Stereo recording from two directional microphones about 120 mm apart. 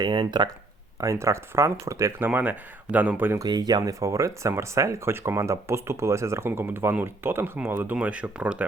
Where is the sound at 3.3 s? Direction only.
35° right (ahead or behind); by 8.6 s 10° right (ahead or behind).